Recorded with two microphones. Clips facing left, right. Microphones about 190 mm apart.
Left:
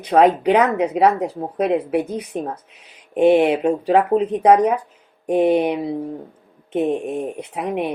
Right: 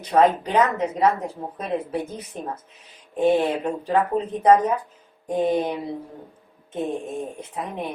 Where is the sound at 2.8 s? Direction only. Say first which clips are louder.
Left 6 dB; 75° left (ahead or behind).